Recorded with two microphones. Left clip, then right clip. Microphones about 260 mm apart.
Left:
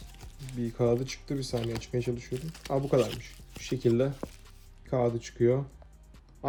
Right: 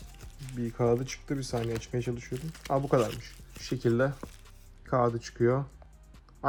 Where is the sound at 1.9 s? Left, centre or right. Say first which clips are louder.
Left 5 dB; centre.